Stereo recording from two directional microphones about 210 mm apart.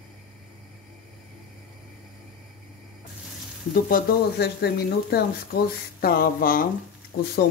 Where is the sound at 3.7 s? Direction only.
45° left (ahead or behind).